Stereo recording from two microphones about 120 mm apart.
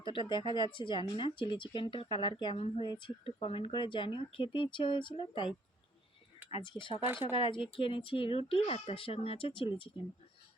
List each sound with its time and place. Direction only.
0.0 s speech: 40° left (ahead or behind)
2.6 s a woman's voice: 55° left (ahead or behind)
2.8 s speech: 40° left (ahead or behind)
6.6 s speech: 45° left (ahead or behind)